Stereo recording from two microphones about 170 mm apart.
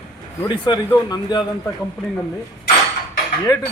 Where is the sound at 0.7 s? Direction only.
25° left (ahead or behind).